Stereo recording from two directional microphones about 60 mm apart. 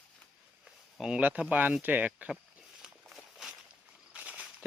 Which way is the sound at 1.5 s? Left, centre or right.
Right.